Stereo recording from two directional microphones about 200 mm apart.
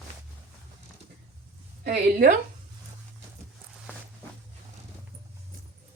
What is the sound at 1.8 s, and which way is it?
Speech, 50° right (ahead or behind).